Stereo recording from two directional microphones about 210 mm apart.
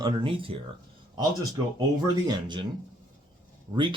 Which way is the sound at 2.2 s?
20° right (ahead or behind).